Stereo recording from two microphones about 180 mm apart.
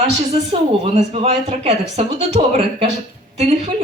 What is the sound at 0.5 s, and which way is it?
Speech, 35° right (ahead or behind).